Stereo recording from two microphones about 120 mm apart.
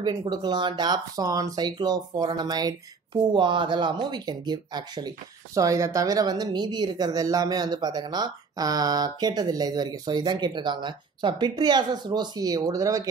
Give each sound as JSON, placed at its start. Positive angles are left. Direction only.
{"t": 0.0, "sound": "speech", "side_deg": -35}